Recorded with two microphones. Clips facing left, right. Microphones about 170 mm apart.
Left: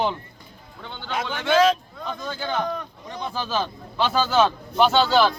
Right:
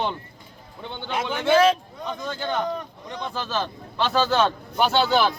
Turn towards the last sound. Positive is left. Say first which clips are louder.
# left 2 dB
turn(degrees=-10)  # may be behind; listen again after turning